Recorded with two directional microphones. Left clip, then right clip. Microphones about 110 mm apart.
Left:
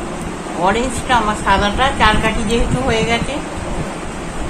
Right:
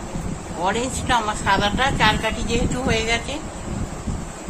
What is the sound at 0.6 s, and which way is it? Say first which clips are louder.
A woman's voice: left 6 dB; 45° right (ahead or behind).